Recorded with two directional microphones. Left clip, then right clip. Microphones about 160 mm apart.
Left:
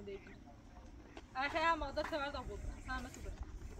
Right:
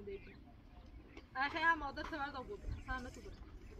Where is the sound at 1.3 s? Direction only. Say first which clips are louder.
Even; 25° left (ahead or behind).